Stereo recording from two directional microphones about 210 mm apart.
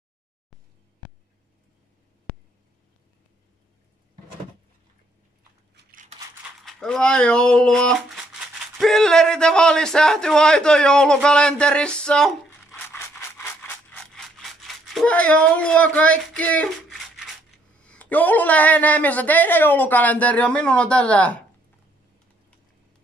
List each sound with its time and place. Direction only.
5.8 s scissors: 40° right (ahead or behind)
6.6 s speech: centre (ahead or behind)
17.7 s speech: 5° left (ahead or behind)